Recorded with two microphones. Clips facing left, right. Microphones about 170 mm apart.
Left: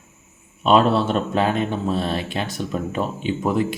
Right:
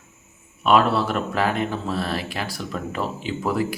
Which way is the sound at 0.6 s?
25° left (ahead or behind).